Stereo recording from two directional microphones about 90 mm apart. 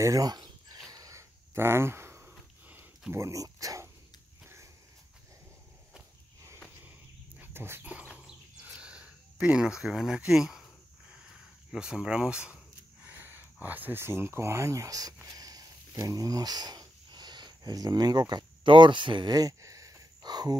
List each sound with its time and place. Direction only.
0.0 s speech: 40° right (ahead or behind)
0.8 s a sound: 40° right (ahead or behind)
3.1 s speech: 35° right (ahead or behind)
7.3 s bird: 25° right (ahead or behind)
7.9 s bird: 15° right (ahead or behind)
8.6 s a sound: 10° right (ahead or behind)
11.7 s speech: 10° right (ahead or behind)
13.0 s speech: 20° right (ahead or behind); by 15.1 s 40° right (ahead or behind)
15.2 s a sound: 40° right (ahead or behind)